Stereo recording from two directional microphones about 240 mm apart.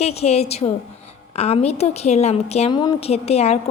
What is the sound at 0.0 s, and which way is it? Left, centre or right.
A woman's voice, left.